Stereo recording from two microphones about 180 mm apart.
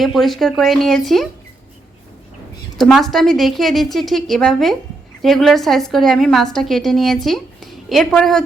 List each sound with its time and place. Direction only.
0.0 s a woman's voice: centre (ahead or behind)
2.7 s a woman's voice: centre (ahead or behind)